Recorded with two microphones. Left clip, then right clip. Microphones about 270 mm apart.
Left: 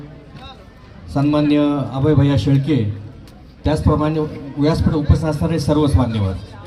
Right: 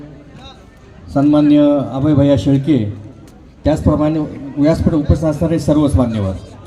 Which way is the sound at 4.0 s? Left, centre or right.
Left.